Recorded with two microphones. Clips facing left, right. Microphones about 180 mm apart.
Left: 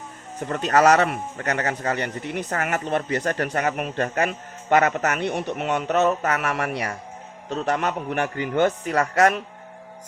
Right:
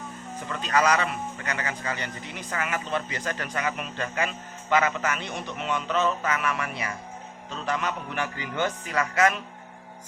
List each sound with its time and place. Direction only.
0.4 s speech: 50° left (ahead or behind)
2.0 s speech: 60° left (ahead or behind)
2.5 s speech: 45° left (ahead or behind)